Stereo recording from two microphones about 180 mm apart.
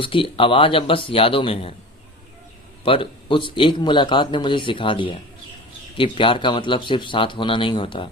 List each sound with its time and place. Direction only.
0.0 s speech: 30° left (ahead or behind)
2.8 s speech: 30° left (ahead or behind)